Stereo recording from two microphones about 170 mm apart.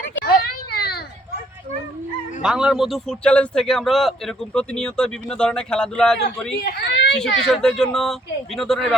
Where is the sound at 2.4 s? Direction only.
5° right (ahead or behind).